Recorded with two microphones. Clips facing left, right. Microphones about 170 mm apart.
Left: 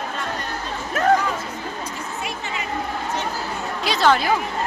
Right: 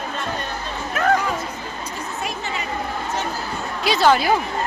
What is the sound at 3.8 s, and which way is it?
Speech, 5° right (ahead or behind).